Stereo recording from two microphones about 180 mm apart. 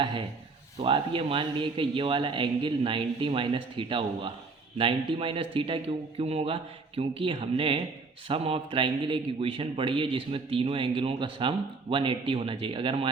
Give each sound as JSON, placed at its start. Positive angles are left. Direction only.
{"t": 0.0, "sound": "a man's voice", "side_deg": -25}